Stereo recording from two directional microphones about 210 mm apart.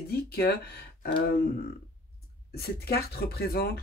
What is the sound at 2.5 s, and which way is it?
Speech, 50° left (ahead or behind).